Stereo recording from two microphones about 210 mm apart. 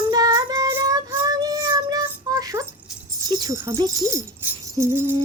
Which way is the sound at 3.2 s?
20° right (ahead or behind).